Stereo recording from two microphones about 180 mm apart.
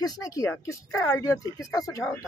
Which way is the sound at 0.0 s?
20° left (ahead or behind).